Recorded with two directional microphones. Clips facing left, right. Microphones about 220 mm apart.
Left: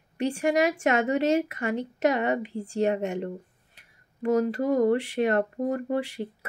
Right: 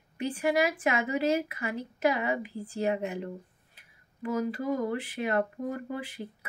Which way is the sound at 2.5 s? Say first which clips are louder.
Left 5 dB; 25° left (ahead or behind).